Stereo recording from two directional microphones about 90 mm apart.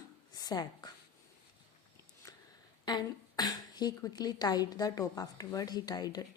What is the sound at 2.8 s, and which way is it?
Speech, 50° left (ahead or behind).